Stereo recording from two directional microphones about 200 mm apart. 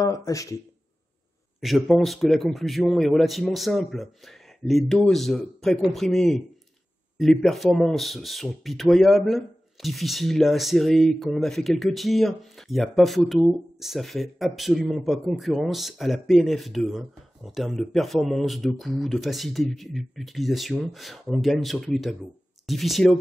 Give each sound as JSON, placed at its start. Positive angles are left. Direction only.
{"t": 0.0, "sound": "speech", "side_deg": 15}
{"t": 1.6, "sound": "speech", "side_deg": 0}